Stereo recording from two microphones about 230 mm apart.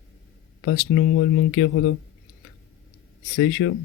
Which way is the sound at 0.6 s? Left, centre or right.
Left.